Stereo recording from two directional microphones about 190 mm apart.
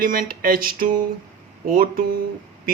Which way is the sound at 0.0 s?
50° right (ahead or behind).